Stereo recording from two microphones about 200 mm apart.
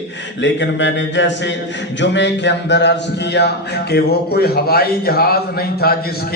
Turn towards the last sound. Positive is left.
turn(degrees=50)  # may be behind; listen again after turning